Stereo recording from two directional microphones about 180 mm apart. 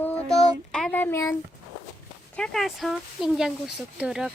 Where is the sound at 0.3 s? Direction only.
Centre (ahead or behind).